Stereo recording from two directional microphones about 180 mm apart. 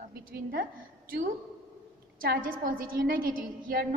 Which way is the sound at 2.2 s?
55° right (ahead or behind).